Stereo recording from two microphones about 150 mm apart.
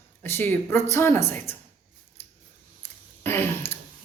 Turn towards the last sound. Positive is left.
turn(degrees=15)  # may be behind; listen again after turning